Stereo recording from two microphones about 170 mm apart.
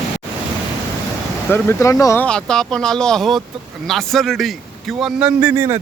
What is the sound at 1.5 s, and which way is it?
Speech, 15° left (ahead or behind).